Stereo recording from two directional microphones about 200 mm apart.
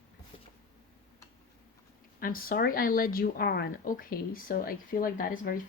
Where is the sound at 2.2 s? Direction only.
45° left (ahead or behind).